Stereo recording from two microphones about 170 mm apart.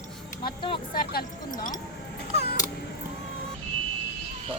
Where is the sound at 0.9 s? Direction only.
60° left (ahead or behind).